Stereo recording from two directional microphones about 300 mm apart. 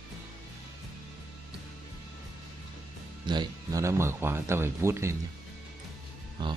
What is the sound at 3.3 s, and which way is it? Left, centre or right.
Speech, centre.